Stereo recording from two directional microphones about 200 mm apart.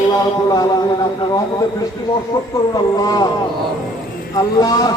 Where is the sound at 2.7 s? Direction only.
20° left (ahead or behind).